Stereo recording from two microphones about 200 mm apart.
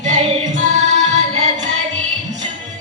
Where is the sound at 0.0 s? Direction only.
35° right (ahead or behind).